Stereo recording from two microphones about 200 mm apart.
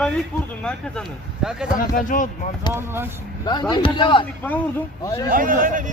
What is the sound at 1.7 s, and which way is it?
Speech, 40° left (ahead or behind).